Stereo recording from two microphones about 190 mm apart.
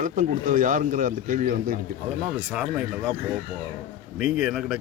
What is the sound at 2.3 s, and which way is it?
Speech, 5° right (ahead or behind).